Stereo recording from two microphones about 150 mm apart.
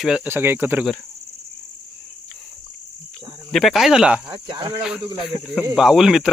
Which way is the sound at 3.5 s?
Centre (ahead or behind).